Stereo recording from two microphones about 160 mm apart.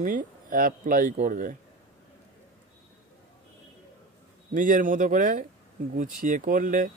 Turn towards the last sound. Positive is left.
turn(degrees=-55)  # may be behind; listen again after turning